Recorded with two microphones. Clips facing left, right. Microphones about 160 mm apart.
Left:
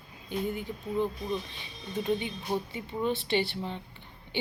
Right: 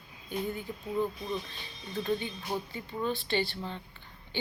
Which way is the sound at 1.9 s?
20° left (ahead or behind).